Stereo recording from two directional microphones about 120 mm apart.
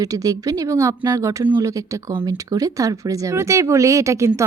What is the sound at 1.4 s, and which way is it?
Speech, 15° right (ahead or behind).